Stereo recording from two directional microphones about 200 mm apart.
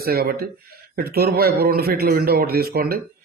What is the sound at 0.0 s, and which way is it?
A man's voice, 50° right (ahead or behind).